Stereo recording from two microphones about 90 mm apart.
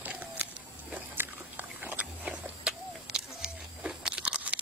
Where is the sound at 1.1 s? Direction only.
20° right (ahead or behind).